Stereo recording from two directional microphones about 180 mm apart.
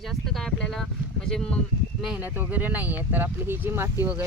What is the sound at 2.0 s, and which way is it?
Speech, 5° right (ahead or behind).